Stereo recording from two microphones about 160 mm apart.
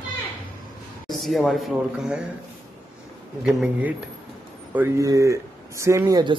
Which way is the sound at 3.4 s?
5° right (ahead or behind).